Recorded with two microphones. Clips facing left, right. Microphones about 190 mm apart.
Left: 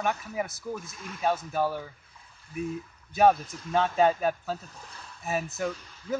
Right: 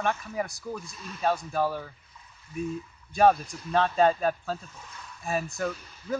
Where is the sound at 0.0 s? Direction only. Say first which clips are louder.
Right 1 dB; 5° left (ahead or behind).